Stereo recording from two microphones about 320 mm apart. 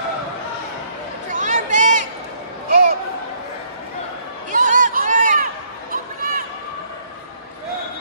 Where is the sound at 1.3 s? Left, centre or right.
Right.